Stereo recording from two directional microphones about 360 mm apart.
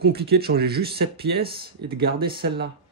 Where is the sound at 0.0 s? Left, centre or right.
Right.